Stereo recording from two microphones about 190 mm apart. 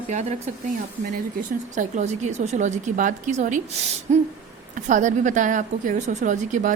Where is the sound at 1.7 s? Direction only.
40° right (ahead or behind).